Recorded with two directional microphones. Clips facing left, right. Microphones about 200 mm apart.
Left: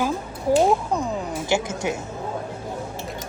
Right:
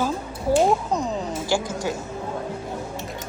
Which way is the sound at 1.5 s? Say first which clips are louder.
Left 1 dB; 25° left (ahead or behind).